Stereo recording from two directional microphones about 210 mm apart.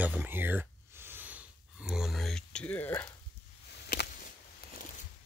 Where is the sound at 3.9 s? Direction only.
45° left (ahead or behind).